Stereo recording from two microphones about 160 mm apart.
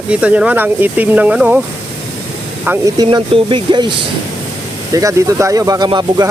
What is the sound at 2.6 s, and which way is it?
Speech, 10° right (ahead or behind).